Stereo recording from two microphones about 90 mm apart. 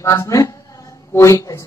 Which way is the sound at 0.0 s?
35° left (ahead or behind).